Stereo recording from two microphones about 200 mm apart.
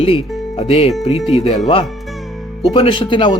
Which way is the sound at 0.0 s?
30° left (ahead or behind).